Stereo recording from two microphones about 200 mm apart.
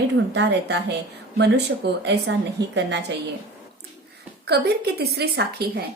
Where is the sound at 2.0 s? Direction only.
60° right (ahead or behind).